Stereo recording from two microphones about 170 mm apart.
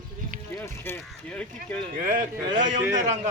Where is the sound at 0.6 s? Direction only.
15° left (ahead or behind).